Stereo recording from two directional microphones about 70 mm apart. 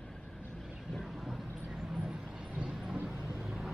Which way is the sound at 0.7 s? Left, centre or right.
Centre.